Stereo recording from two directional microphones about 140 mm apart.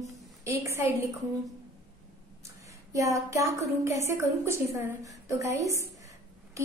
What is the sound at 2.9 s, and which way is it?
A woman's voice, 20° right (ahead or behind).